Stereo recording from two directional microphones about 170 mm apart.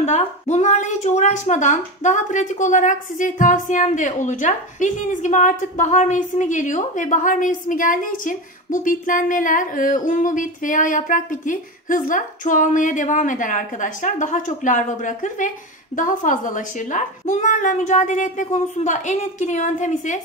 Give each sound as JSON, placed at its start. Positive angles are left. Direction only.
{"t": 0.0, "sound": "a woman's voice", "side_deg": 40}